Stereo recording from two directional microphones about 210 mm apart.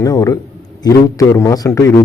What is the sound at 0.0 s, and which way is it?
Speech, 15° left (ahead or behind).